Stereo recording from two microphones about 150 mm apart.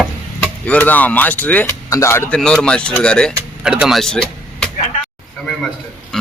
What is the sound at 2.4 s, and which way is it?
Speech, 5° left (ahead or behind).